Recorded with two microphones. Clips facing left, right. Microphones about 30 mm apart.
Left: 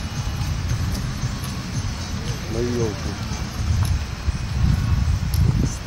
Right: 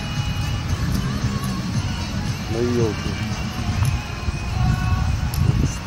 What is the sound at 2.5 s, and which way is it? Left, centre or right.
Speech, right.